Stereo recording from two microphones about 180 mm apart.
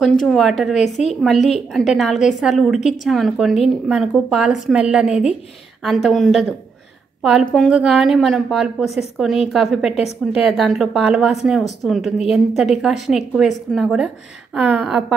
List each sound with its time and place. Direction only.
0.0 s a woman's voice: centre (ahead or behind)
0.8 s a woman's voice: 40° left (ahead or behind)
1.5 s a woman's voice: centre (ahead or behind)